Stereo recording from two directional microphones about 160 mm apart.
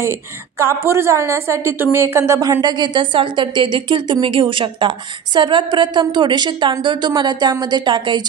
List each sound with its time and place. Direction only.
0.0 s a woman's voice: 15° right (ahead or behind)